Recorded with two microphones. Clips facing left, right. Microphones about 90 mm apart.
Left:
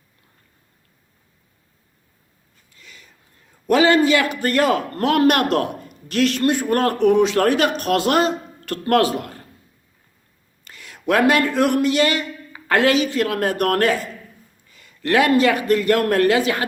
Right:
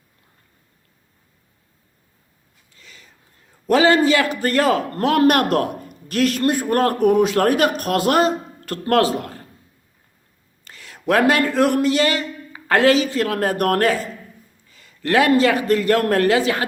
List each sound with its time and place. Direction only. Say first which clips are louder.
2.7 s a sound: left 1 dB; 30° right (ahead or behind)
3.7 s a man's voice: even; 30° right (ahead or behind); by 7.5 s 45° right (ahead or behind)
7.9 s a man's voice: even; 35° right (ahead or behind)
10.6 s a man's voice: even; 30° right (ahead or behind)